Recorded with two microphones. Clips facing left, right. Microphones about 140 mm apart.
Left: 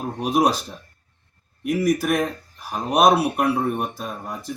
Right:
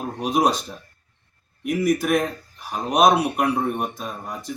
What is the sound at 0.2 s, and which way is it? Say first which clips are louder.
Speech: left 1 dB; 5° left (ahead or behind).